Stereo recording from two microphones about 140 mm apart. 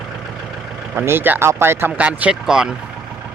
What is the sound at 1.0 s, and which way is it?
Speech, 15° right (ahead or behind).